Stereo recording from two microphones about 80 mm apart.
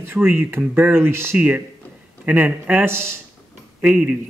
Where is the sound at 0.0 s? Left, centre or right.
Right.